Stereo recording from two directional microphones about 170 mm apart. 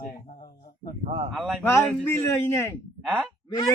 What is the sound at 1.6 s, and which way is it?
A man's voice, 15° left (ahead or behind).